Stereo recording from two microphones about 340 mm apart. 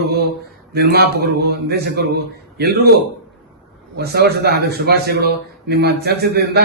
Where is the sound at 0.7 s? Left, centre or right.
Right.